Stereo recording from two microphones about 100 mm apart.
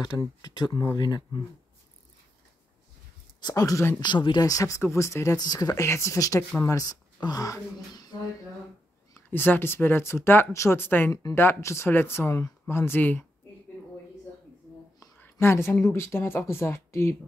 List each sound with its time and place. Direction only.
0.4 s speech: 45° left (ahead or behind)
3.3 s speech: 40° left (ahead or behind)
4.0 s speech: 50° left (ahead or behind)
4.5 s speech: 35° left (ahead or behind)
9.3 s speech: 20° left (ahead or behind)
15.1 s a woman's voice: 20° left (ahead or behind)